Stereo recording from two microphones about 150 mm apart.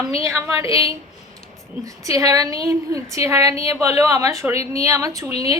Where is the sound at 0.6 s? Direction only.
40° left (ahead or behind).